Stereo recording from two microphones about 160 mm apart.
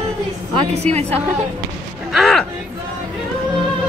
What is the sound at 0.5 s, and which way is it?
Speech, 40° right (ahead or behind).